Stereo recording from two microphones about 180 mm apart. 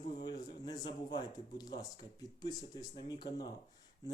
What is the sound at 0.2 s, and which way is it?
Speech, 25° left (ahead or behind).